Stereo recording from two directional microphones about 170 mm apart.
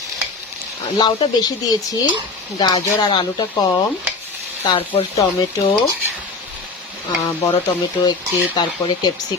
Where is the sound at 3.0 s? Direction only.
25° left (ahead or behind).